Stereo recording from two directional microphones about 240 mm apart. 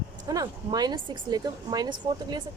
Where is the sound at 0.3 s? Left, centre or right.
Centre.